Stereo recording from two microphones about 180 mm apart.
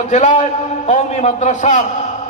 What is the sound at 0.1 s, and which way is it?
A man's voice, 45° left (ahead or behind).